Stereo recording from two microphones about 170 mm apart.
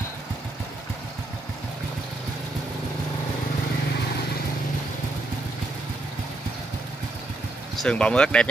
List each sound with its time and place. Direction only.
7.7 s speech: 5° left (ahead or behind)